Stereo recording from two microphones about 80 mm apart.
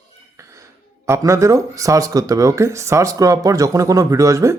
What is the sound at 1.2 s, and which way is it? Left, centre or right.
Speech, right.